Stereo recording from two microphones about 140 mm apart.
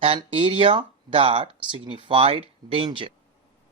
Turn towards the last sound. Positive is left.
turn(degrees=-40)  # may be behind; listen again after turning